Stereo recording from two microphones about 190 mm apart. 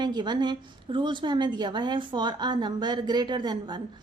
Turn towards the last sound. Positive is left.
turn(degrees=-25)  # may be behind; listen again after turning